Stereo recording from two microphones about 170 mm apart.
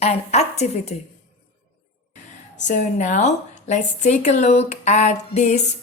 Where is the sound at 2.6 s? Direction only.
45° left (ahead or behind).